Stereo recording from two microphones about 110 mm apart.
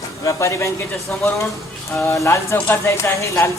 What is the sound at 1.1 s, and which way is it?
Speech, 15° left (ahead or behind).